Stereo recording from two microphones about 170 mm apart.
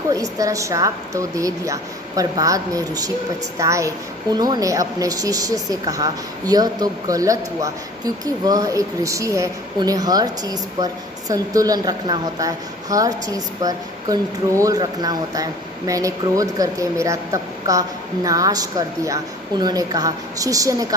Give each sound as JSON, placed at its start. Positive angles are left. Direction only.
{"t": 0.1, "sound": "a woman's voice", "side_deg": -20}